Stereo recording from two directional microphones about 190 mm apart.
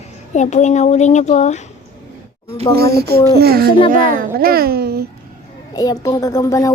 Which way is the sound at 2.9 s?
55° right (ahead or behind).